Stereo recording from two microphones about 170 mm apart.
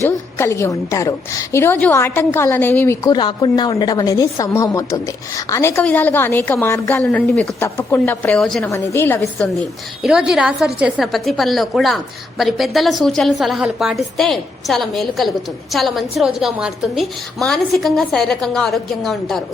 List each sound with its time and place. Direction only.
0.3 s a woman's voice: 15° left (ahead or behind)
8.7 s a woman's voice: 15° left (ahead or behind)
10.0 s a woman's voice: 5° right (ahead or behind)